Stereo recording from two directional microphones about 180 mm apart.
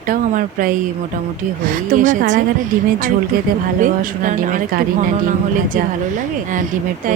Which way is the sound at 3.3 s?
55° right (ahead or behind).